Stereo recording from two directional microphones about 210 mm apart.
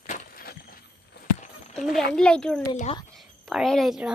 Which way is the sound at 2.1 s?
5° left (ahead or behind).